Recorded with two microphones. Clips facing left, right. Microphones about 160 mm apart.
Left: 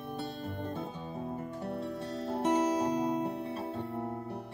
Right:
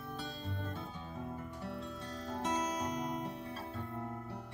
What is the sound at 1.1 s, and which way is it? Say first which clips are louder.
Music: left 4 dB; 30° left (ahead or behind).